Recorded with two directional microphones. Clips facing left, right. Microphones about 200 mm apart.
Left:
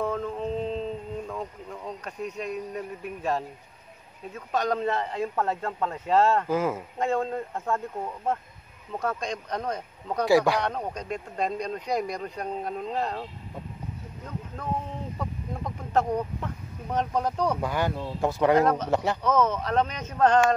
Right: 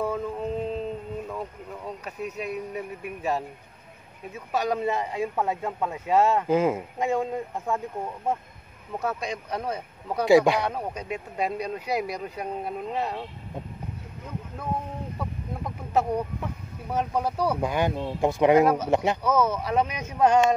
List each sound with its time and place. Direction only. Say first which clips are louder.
0.0 s a sound: even; 5° right (ahead or behind)
1.2 s speech: even; 5° right (ahead or behind)
6.4 s speech: right 4 dB; 20° right (ahead or behind)
8.9 s speech: even; 5° right (ahead or behind)
10.2 s speech: right 3 dB; 20° right (ahead or behind)
10.6 s speech: even; 5° right (ahead or behind)
15.1 s speech: even; 5° right (ahead or behind)